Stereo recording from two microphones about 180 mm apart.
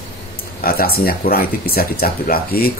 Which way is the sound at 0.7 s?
55° left (ahead or behind).